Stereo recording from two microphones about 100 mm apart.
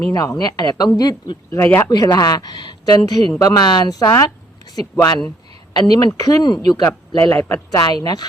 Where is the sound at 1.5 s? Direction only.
25° left (ahead or behind).